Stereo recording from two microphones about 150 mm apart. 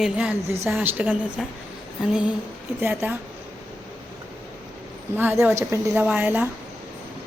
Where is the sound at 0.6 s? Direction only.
15° right (ahead or behind).